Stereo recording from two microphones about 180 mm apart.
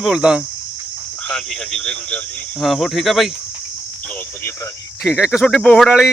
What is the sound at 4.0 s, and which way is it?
Cricket, 10° left (ahead or behind).